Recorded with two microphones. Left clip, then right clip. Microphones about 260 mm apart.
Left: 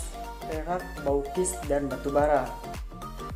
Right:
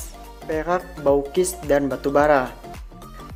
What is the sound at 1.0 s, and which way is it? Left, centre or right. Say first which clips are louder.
Speech: right 8 dB; right.